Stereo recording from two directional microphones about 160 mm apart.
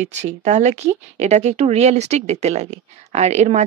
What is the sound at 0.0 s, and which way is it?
Speech, 45° right (ahead or behind).